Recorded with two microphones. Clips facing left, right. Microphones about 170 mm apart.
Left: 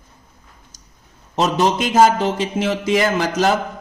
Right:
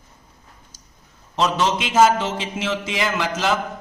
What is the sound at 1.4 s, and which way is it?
A man's voice, 40° left (ahead or behind).